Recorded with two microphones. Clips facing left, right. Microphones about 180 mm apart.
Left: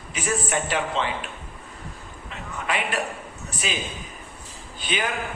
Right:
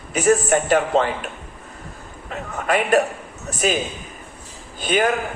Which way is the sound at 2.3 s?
45° right (ahead or behind).